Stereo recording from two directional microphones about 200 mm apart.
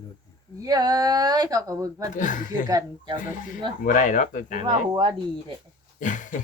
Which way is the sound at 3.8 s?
40° left (ahead or behind).